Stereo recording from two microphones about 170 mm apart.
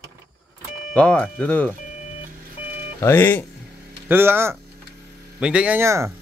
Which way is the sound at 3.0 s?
10° left (ahead or behind).